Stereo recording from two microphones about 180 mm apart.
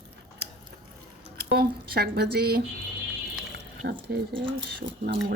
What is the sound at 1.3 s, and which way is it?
Squish, 60° right (ahead or behind).